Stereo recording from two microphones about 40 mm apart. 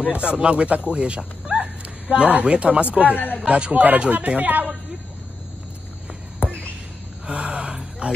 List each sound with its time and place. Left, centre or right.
0.0 s speech: right
6.4 s a sound: left
7.2 s gasp: right